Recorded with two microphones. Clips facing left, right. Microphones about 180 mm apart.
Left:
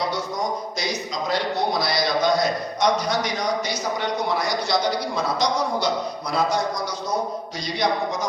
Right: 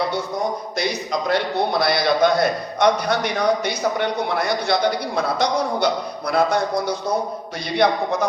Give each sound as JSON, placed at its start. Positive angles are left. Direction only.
{"t": 0.8, "sound": "a man's voice", "side_deg": -60}